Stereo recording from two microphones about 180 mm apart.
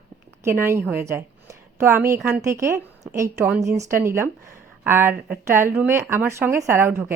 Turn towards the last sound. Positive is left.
turn(degrees=-10)  # may be behind; listen again after turning